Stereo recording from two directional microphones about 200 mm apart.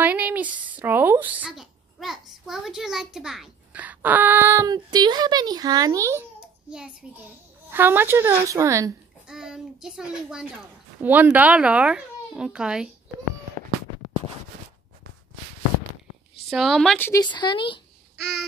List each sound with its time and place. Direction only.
0.0 s speech: 10° right (ahead or behind)
7.7 s a woman's voice: 10° right (ahead or behind)
9.3 s a child's voice: 5° right (ahead or behind)
16.4 s a child's voice: centre (ahead or behind)
17.1 s speech: 20° left (ahead or behind)